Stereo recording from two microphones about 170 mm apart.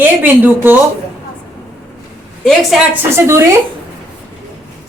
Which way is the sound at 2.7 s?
Centre (ahead or behind).